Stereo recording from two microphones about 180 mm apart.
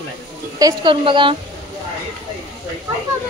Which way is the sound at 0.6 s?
25° right (ahead or behind).